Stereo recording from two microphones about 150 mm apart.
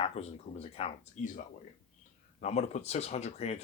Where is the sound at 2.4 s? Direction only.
50° left (ahead or behind).